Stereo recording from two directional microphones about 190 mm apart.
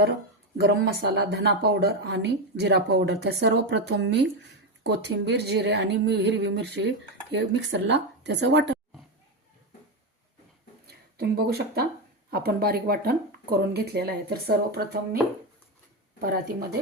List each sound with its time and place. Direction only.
0.6 s speech: 60° right (ahead or behind)
10.8 s speech: 55° right (ahead or behind)
16.2 s speech: 50° right (ahead or behind)